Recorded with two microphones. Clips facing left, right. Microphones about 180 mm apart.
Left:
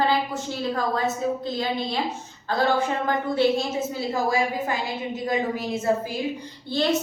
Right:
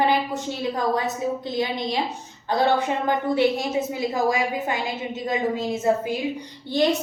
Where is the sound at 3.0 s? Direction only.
15° right (ahead or behind).